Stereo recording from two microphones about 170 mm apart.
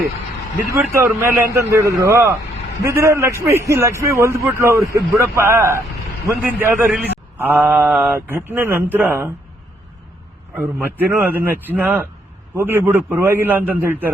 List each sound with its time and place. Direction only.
0.7 s a man's voice: 15° right (ahead or behind)
10.5 s a man's voice: 10° right (ahead or behind)